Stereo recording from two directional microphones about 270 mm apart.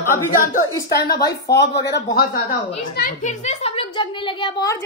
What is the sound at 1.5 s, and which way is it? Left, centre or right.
Speech, left.